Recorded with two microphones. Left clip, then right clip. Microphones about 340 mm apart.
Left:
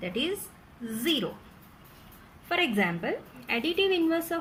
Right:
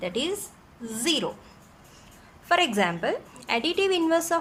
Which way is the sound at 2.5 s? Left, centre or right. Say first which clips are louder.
Right 4 dB; centre.